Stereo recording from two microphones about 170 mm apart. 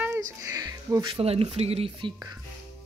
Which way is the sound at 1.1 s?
35° right (ahead or behind).